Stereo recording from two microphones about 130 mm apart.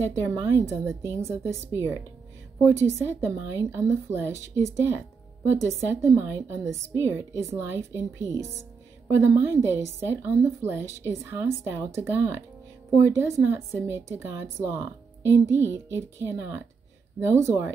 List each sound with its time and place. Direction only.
0.1 s speech: 20° right (ahead or behind)
3.0 s speech: 20° right (ahead or behind)